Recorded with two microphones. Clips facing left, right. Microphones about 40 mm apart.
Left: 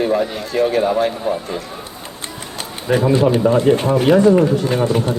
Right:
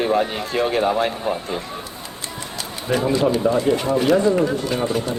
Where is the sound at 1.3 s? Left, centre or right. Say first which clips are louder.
Left 3 dB; right.